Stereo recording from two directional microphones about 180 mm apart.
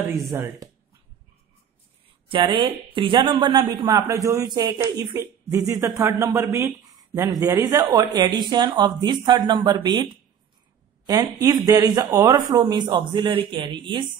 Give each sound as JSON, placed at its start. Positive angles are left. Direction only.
{"t": 0.3, "sound": "speech", "side_deg": -15}
{"t": 2.2, "sound": "speech", "side_deg": -30}
{"t": 11.1, "sound": "speech", "side_deg": -20}